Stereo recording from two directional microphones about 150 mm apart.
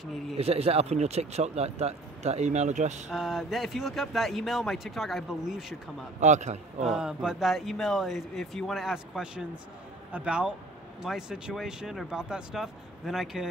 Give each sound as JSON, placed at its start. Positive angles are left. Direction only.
{"t": 0.4, "sound": "speech", "side_deg": -40}
{"t": 3.1, "sound": "speech", "side_deg": 0}
{"t": 6.1, "sound": "speech", "side_deg": -50}
{"t": 6.8, "sound": "speech", "side_deg": -5}